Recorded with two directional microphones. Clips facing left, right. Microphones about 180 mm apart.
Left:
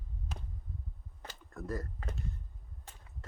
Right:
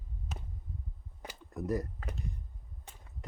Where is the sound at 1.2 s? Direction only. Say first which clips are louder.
Right 5 dB; 20° right (ahead or behind).